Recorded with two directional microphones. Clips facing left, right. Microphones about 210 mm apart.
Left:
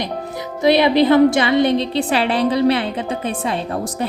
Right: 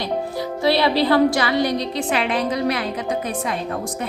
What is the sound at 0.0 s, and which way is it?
A woman's voice, 20° left (ahead or behind).